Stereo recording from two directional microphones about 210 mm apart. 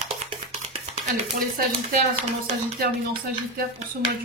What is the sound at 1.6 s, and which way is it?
Speech, 35° right (ahead or behind).